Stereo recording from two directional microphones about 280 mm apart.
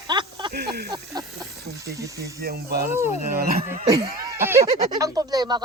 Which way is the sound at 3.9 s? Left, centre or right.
Centre.